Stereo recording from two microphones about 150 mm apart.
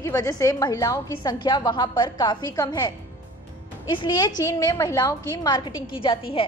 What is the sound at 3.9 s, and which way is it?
A woman's voice, 30° left (ahead or behind).